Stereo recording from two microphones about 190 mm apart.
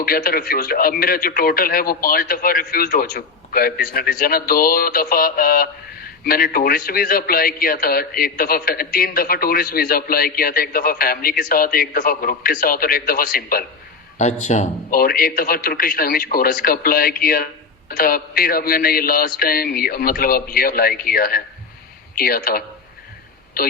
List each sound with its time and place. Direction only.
0.0 s a man's voice: 50° left (ahead or behind)
14.2 s a man's voice: 35° left (ahead or behind)